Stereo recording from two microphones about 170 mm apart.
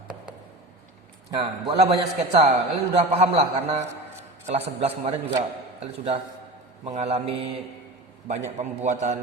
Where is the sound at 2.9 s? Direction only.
40° right (ahead or behind).